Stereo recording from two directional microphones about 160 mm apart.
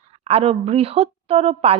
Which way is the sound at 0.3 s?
40° right (ahead or behind).